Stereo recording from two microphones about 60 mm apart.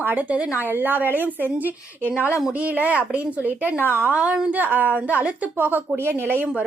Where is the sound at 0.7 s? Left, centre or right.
Right.